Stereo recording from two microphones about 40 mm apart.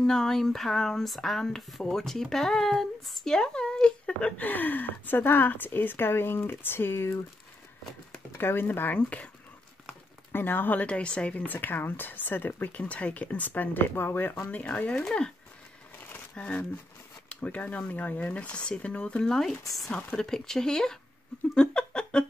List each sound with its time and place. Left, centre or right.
0.0 s speech: centre
4.4 s speech: left
8.4 s speech: left
8.6 s speech: left
8.9 s speech: left
10.3 s speech: left
10.8 s a woman's voice: left
11.3 s speech: left
16.3 s a woman's voice: left
20.1 s speech: centre
21.5 s a sound: left